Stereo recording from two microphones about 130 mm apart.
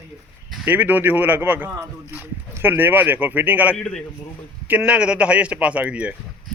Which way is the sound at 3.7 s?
5° left (ahead or behind).